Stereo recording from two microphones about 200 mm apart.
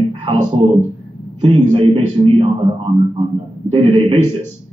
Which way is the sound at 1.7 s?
25° right (ahead or behind).